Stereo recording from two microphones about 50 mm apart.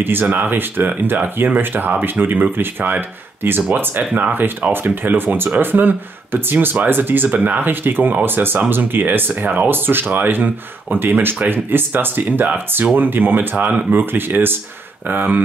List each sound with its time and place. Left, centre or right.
0.0 s speech: right